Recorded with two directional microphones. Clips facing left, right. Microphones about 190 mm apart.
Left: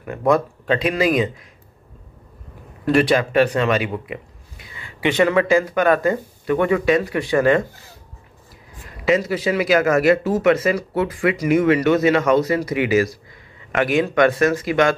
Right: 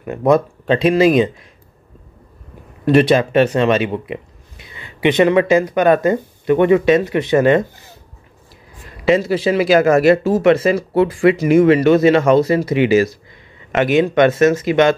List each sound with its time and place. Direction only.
0.0 s speech: 20° right (ahead or behind)
2.8 s speech: 25° right (ahead or behind)
9.0 s speech: 30° right (ahead or behind)